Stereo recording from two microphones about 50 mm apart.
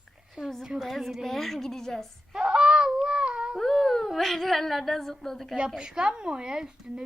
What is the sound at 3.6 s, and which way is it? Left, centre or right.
Speech, centre.